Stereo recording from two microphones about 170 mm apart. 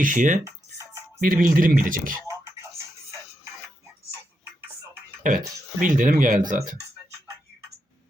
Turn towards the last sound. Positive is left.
turn(degrees=-50)  # may be behind; listen again after turning